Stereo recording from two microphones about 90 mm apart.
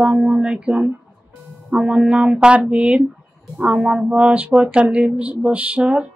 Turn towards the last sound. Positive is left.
turn(degrees=-15)  # may be behind; listen again after turning